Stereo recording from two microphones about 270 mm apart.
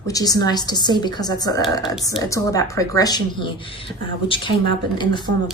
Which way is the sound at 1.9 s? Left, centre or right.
Centre.